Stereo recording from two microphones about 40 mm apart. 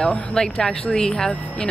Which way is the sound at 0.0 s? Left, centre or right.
Centre.